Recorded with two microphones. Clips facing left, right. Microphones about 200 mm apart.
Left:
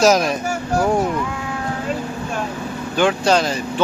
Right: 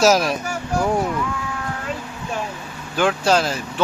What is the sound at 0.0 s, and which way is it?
Speech, centre (ahead or behind).